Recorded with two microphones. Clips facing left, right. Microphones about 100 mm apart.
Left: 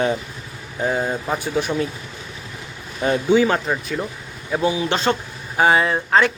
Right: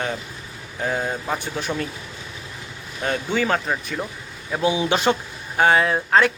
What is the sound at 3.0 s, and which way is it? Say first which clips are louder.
Speech: left 6 dB; 10° left (ahead or behind).